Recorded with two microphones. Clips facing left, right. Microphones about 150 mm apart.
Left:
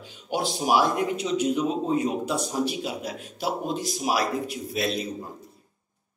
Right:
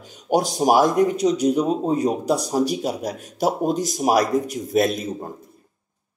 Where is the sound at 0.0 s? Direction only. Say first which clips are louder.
Right 8 dB; 45° right (ahead or behind).